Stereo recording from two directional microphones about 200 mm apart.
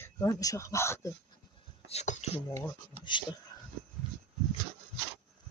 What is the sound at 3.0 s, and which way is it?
Speech, 30° right (ahead or behind).